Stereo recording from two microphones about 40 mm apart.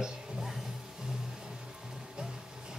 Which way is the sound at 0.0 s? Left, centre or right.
Centre.